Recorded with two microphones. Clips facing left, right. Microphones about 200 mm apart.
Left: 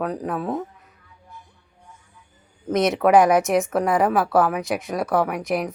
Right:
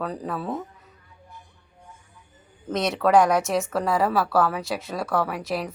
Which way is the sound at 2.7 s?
20° left (ahead or behind).